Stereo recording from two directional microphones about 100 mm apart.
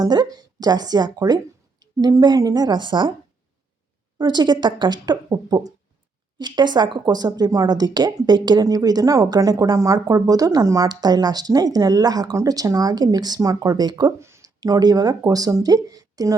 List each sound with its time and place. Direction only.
0.0 s speech: 40° right (ahead or behind)
4.2 s speech: 45° right (ahead or behind)
14.2 s a sound: 25° right (ahead or behind)
14.6 s speech: 40° right (ahead or behind)